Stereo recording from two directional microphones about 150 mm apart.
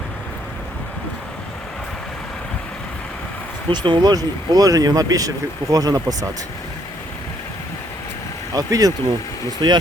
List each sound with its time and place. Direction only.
3.7 s speech: 30° right (ahead or behind)
8.5 s speech: 25° right (ahead or behind)